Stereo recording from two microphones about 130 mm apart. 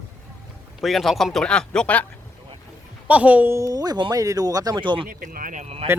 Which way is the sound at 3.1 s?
10° right (ahead or behind).